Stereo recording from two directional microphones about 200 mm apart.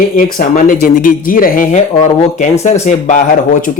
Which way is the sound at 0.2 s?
45° left (ahead or behind).